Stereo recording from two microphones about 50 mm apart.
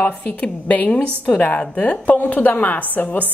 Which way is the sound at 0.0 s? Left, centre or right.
Left.